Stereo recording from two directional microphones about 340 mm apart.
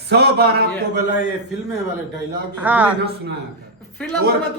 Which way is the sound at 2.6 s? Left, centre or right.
Centre.